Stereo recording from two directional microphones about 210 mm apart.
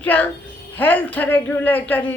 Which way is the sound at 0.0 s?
10° left (ahead or behind).